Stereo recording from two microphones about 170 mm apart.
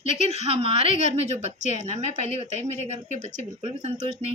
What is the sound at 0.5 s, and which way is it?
A woman's voice, 40° right (ahead or behind).